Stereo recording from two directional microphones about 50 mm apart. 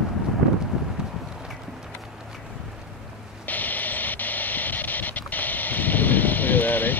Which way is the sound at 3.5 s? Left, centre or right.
Left.